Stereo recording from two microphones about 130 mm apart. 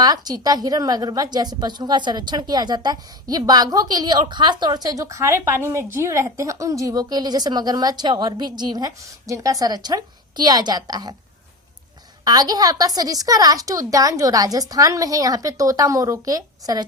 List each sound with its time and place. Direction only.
0.0 s a woman's voice: 30° right (ahead or behind)
12.2 s a woman's voice: 30° right (ahead or behind)